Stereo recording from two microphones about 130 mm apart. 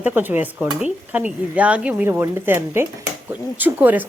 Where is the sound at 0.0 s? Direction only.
15° right (ahead or behind).